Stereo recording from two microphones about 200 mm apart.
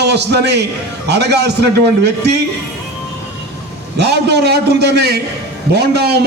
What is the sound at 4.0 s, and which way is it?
A man's voice, 55° right (ahead or behind).